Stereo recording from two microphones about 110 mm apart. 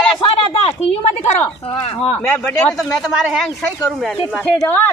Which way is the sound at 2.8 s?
5° right (ahead or behind).